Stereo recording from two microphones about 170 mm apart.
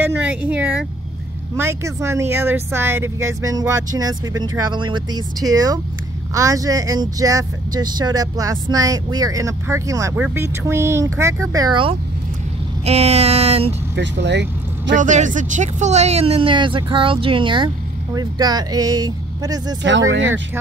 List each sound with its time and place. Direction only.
0.0 s speech: 10° right (ahead or behind); by 11.9 s 25° right (ahead or behind)
12.8 s speech: 40° right (ahead or behind)
13.9 s speech: 90° right
15.0 s speech: 45° right (ahead or behind); by 19.8 s 20° right (ahead or behind)
19.8 s speech: 90° right